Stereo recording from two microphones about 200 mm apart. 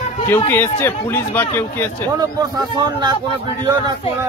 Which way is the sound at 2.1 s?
20° right (ahead or behind).